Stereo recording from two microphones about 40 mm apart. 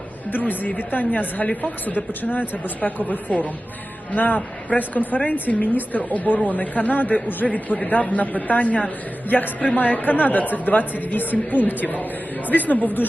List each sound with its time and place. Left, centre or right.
0.3 s a woman's voice: left